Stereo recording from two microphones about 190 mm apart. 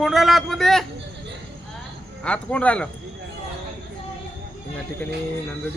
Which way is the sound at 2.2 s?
5° left (ahead or behind).